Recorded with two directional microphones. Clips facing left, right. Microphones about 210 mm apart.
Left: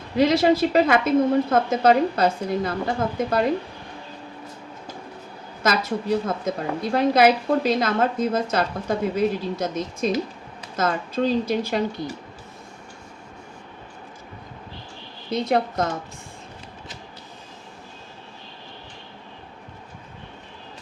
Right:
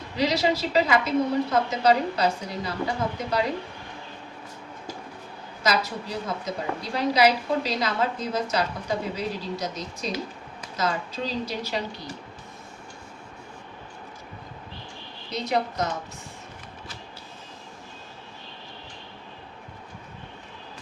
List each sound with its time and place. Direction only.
0.2 s a woman's voice: 55° left (ahead or behind)
5.6 s a woman's voice: 50° left (ahead or behind)
15.3 s a woman's voice: 50° left (ahead or behind)